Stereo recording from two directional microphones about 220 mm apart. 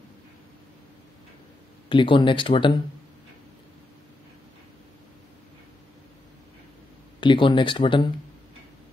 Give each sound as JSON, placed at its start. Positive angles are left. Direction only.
{"t": 1.9, "sound": "speech", "side_deg": 25}
{"t": 7.2, "sound": "speech", "side_deg": 20}